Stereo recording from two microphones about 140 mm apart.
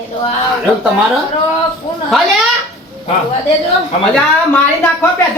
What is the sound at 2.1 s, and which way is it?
Speech, centre (ahead or behind).